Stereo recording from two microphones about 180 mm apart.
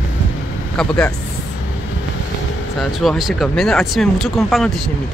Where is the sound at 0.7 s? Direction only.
5° left (ahead or behind).